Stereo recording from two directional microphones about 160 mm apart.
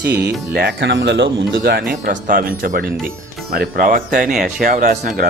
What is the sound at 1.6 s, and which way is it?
Speech, 70° right (ahead or behind).